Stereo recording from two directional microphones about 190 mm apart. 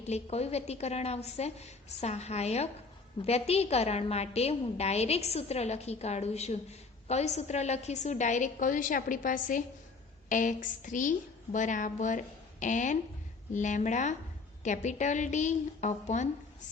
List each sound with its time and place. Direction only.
0.1 s a woman's voice: 35° left (ahead or behind)